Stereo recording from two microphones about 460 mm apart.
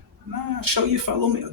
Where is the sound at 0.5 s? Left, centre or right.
Right.